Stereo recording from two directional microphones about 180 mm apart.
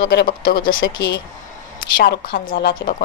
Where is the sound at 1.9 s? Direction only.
55° left (ahead or behind).